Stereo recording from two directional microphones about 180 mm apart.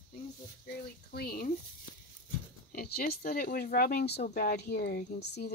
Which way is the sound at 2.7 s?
60° left (ahead or behind).